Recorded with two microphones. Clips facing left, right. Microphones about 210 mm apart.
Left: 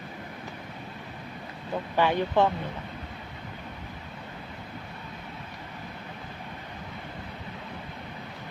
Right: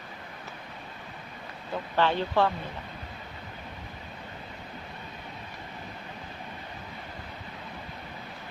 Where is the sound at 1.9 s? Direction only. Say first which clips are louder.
Left 2 dB; 15° left (ahead or behind).